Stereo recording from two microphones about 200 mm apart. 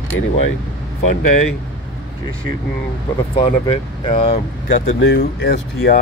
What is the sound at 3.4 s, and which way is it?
Speech, 25° left (ahead or behind).